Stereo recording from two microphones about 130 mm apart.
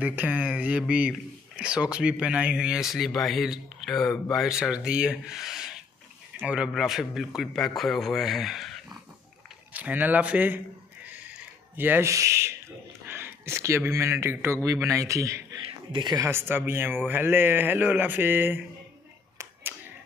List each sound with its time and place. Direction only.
0.0 s a man's voice: 15° right (ahead or behind)
9.8 s speech: 15° right (ahead or behind)
11.7 s speech: 15° right (ahead or behind)
15.9 s speech: 35° right (ahead or behind)
16.2 s speech: 20° right (ahead or behind)